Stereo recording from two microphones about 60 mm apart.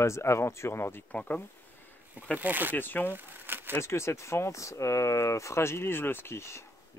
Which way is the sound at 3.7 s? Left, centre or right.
Left.